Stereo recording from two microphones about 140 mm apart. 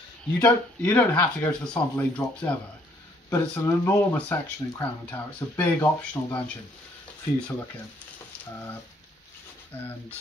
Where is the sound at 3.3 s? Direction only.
20° left (ahead or behind).